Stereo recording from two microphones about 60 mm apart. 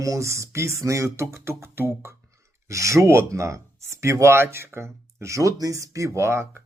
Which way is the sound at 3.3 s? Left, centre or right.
Right.